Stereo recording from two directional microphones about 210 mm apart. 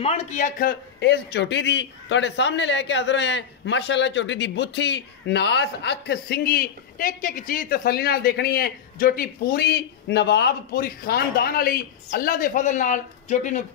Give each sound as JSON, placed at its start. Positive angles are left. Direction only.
{"t": 0.0, "sound": "a man's voice", "side_deg": 30}